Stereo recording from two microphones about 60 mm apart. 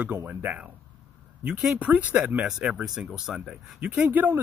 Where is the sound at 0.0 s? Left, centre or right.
Right.